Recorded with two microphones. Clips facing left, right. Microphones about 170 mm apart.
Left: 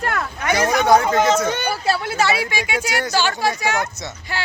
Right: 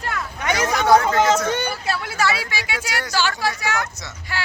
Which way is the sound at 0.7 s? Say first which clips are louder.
Even; 15° left (ahead or behind).